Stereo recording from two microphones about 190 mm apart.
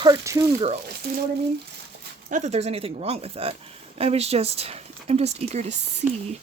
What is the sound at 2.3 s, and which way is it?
Speech, 40° right (ahead or behind).